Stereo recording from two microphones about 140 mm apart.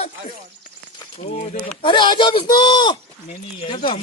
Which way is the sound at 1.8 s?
35° left (ahead or behind).